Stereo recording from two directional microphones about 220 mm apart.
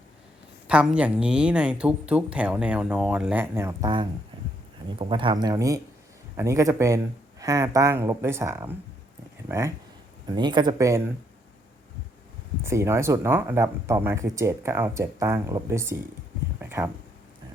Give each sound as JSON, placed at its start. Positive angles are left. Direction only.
{"t": 0.7, "sound": "speech", "side_deg": -5}
{"t": 12.6, "sound": "speech", "side_deg": -10}
{"t": 16.6, "sound": "a sound", "side_deg": -10}